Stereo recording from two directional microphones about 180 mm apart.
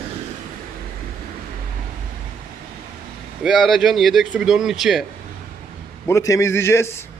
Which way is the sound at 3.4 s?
Centre (ahead or behind).